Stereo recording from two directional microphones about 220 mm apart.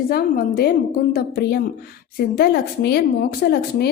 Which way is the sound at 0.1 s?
45° left (ahead or behind).